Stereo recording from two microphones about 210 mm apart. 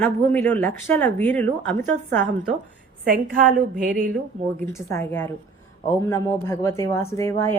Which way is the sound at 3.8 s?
40° right (ahead or behind).